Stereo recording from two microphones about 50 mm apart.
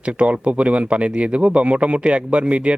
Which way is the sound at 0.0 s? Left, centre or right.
Right.